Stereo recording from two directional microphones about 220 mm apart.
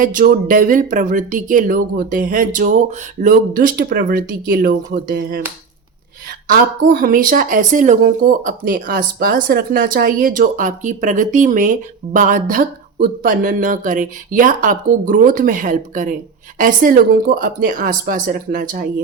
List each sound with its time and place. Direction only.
0.0 s speech: 35° right (ahead or behind)
6.5 s speech: 40° right (ahead or behind)